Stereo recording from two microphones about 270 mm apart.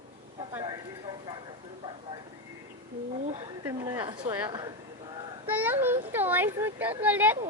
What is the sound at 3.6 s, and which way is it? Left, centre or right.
A woman's voice, centre.